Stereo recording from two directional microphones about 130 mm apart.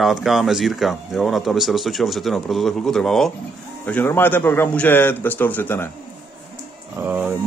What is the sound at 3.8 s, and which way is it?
A man's voice, 15° left (ahead or behind).